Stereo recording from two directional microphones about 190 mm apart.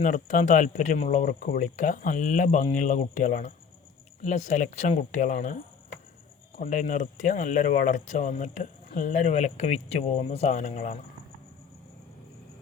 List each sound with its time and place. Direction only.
0.0 s speech: 45° left (ahead or behind)
6.6 s speech: 40° left (ahead or behind)